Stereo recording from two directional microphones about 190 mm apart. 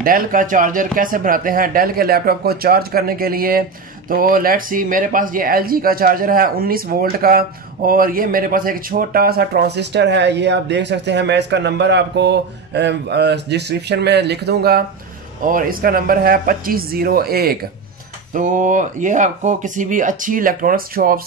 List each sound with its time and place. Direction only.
0.0 s speech: 45° right (ahead or behind)
18.3 s speech: 40° right (ahead or behind)